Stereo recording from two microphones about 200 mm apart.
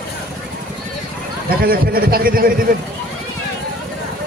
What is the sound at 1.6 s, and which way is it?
A man's voice, 50° right (ahead or behind).